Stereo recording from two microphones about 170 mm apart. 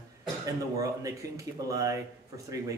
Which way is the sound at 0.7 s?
20° right (ahead or behind).